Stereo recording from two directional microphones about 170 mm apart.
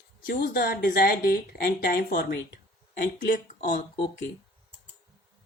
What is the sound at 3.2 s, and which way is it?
Speech, 50° left (ahead or behind).